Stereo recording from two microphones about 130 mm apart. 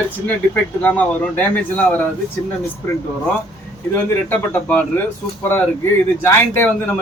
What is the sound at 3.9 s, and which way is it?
Speech, 15° left (ahead or behind).